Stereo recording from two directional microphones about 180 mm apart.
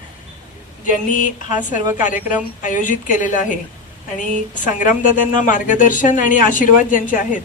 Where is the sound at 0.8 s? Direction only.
45° left (ahead or behind).